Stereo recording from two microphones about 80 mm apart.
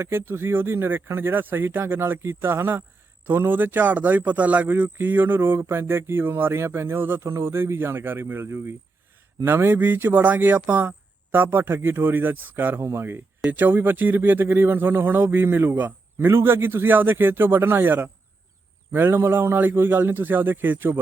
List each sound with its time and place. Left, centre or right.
0.0 s a man's voice: right